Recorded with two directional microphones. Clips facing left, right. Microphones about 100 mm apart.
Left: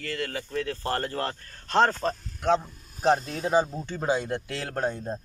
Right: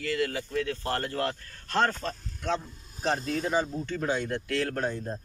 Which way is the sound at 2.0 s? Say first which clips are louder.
Left 6 dB; 45° left (ahead or behind).